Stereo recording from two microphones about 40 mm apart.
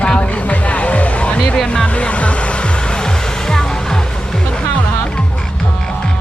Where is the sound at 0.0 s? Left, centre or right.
Left; by 4.0 s centre.